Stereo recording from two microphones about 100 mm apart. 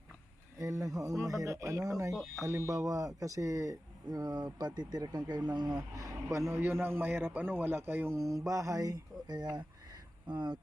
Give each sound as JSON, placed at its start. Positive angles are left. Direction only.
{"t": 0.6, "sound": "speech", "side_deg": -35}
{"t": 6.3, "sound": "a man's voice", "side_deg": -30}